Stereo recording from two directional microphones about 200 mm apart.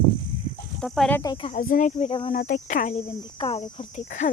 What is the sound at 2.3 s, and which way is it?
Speech, 45° left (ahead or behind).